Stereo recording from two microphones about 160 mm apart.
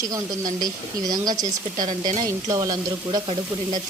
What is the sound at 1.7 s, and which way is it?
Speech, 55° right (ahead or behind).